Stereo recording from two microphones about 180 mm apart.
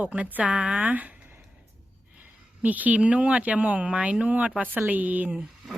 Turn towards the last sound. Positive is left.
turn(degrees=-5)  # may be behind; listen again after turning